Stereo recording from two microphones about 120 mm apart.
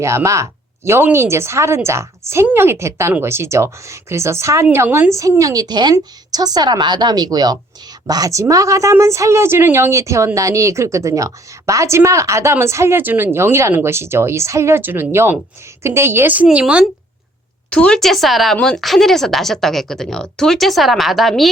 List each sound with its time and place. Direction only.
0.0 s a woman's voice: 25° right (ahead or behind)
17.7 s speech: 10° left (ahead or behind)